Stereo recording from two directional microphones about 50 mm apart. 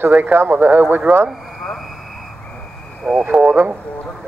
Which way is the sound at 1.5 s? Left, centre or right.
Centre.